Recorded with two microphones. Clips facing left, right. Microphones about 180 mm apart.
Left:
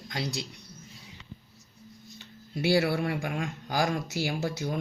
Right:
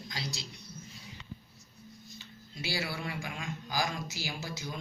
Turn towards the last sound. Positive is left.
turn(degrees=60)  # may be behind; listen again after turning